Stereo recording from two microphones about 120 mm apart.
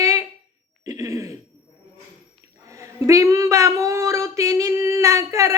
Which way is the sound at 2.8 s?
25° right (ahead or behind).